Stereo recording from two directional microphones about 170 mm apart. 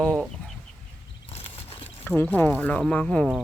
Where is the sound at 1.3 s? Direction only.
35° left (ahead or behind).